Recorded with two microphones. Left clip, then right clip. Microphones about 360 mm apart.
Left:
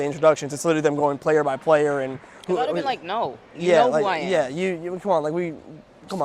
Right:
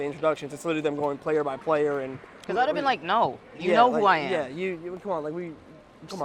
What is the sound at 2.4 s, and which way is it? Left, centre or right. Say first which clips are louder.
Speech: left 1 dB; right.